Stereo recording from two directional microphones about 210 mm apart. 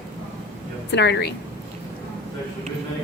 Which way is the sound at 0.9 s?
55° left (ahead or behind).